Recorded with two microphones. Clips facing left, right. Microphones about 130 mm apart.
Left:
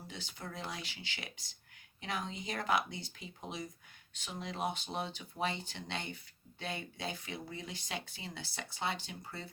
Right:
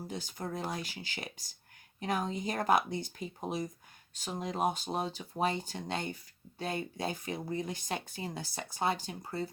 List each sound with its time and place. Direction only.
0.1 s speech: 45° right (ahead or behind)